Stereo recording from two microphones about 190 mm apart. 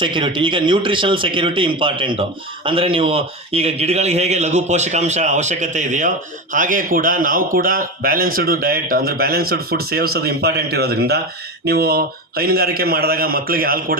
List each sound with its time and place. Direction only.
0.0 s a man's voice: 25° right (ahead or behind); by 13.9 s 50° right (ahead or behind)